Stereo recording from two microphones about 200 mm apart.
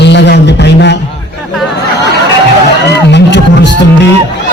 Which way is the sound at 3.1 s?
60° left (ahead or behind).